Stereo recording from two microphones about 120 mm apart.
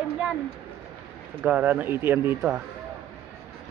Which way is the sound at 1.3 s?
15° right (ahead or behind).